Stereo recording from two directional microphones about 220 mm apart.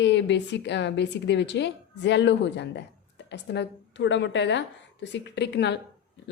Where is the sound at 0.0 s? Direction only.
55° left (ahead or behind).